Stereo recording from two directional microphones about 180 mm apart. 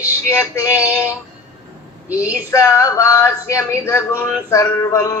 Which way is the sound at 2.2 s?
15° left (ahead or behind).